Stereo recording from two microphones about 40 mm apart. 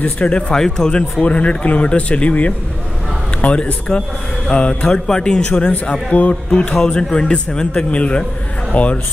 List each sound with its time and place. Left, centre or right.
0.0 s speech: left
0.5 s speech: centre
1.2 s speech: left
5.5 s speech: left
6.7 s speech: centre; by 9.0 s left